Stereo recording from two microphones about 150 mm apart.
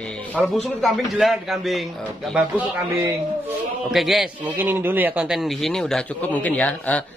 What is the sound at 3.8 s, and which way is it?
A man's voice, centre (ahead or behind).